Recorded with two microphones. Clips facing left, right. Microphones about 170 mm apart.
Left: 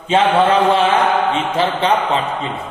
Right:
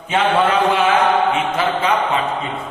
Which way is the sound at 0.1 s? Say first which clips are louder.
Left 3 dB; 30° left (ahead or behind).